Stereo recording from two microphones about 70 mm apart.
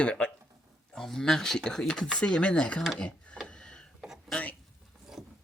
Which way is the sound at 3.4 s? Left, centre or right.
Centre.